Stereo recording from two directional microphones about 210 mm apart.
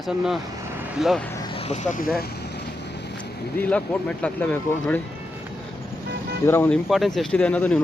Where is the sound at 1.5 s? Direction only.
30° left (ahead or behind).